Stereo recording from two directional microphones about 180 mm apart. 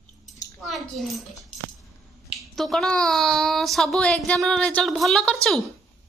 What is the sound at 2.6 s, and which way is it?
Speech, centre (ahead or behind).